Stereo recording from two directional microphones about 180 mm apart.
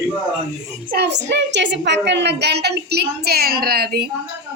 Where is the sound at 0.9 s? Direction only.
65° right (ahead or behind).